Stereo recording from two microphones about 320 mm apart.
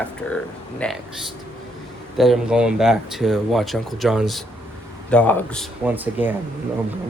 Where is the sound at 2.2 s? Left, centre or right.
Centre.